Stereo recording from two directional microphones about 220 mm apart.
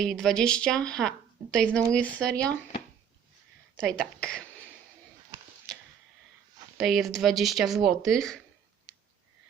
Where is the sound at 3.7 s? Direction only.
5° left (ahead or behind).